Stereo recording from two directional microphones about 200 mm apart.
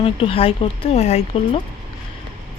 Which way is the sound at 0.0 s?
30° left (ahead or behind).